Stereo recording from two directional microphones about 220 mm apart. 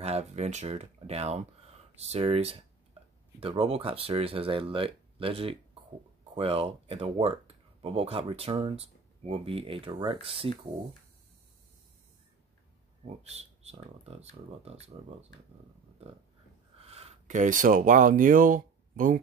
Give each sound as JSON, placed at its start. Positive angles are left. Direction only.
{"t": 0.0, "sound": "speech", "side_deg": -30}
{"t": 13.0, "sound": "speech", "side_deg": -30}
{"t": 16.7, "sound": "speech", "side_deg": -25}